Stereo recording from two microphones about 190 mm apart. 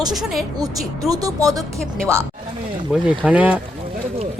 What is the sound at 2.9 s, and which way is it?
Speech, 5° right (ahead or behind).